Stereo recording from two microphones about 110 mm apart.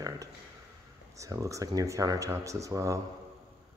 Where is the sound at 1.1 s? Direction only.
30° right (ahead or behind).